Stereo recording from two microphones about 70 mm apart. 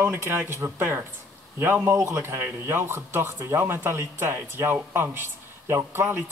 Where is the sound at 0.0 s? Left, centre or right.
Right.